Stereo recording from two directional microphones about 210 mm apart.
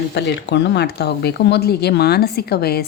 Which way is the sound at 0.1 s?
55° left (ahead or behind).